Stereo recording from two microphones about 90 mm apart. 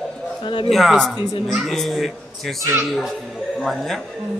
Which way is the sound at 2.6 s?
30° right (ahead or behind).